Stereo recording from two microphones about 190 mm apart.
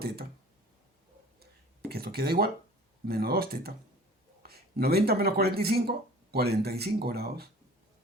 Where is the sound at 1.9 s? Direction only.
55° right (ahead or behind).